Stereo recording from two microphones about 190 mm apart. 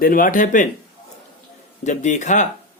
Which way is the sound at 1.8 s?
40° left (ahead or behind).